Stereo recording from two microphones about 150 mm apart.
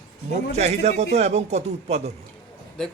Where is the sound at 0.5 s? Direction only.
45° right (ahead or behind).